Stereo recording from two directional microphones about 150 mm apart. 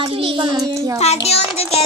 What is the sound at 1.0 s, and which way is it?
Speech, 45° left (ahead or behind).